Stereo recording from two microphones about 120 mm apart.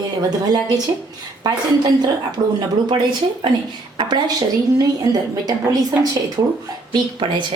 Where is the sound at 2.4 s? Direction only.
40° right (ahead or behind).